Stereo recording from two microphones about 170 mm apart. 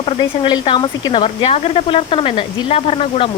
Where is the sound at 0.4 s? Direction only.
25° left (ahead or behind).